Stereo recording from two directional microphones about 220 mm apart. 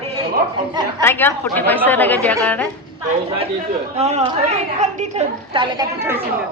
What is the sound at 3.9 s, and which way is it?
A woman's voice, 30° right (ahead or behind).